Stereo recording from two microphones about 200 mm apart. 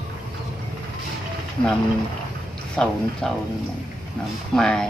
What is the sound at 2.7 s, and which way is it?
Speech, 5° left (ahead or behind).